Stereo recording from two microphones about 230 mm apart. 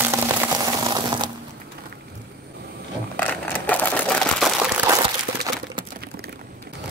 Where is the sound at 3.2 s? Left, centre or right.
Centre.